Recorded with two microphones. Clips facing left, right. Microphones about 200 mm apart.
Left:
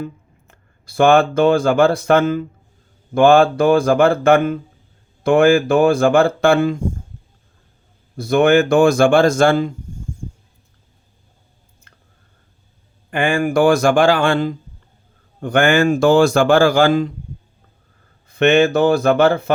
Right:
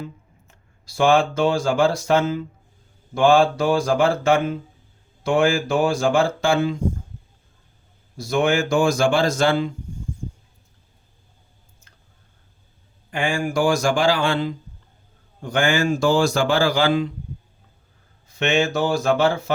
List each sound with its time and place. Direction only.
0.0 s a man's voice: 55° left (ahead or behind)
8.1 s a man's voice: 55° left (ahead or behind)
11.9 s a sound: 60° left (ahead or behind)
13.1 s a man's voice: 55° left (ahead or behind)
18.3 s a man's voice: 55° left (ahead or behind)